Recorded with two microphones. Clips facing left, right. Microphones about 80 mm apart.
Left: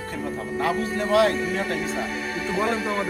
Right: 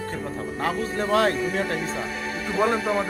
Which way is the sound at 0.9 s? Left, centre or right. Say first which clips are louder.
Left 2 dB; right.